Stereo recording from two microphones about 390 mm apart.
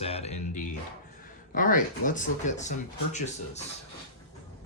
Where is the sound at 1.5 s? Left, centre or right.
Centre.